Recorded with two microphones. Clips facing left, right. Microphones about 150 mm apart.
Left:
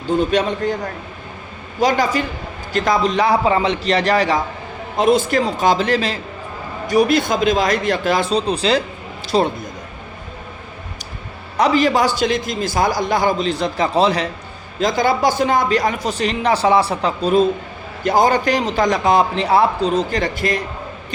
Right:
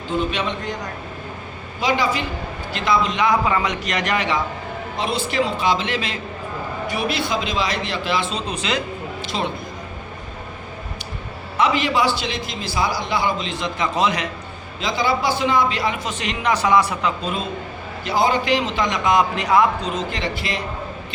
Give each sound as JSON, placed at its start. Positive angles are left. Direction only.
{"t": 0.2, "sound": "a man's voice", "side_deg": 40}
{"t": 1.8, "sound": "a man's voice", "side_deg": 45}
{"t": 11.5, "sound": "a man's voice", "side_deg": 40}
{"t": 14.8, "sound": "a man's voice", "side_deg": 45}